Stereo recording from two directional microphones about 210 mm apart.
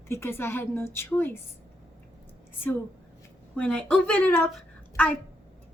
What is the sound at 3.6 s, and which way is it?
Speech, 5° left (ahead or behind).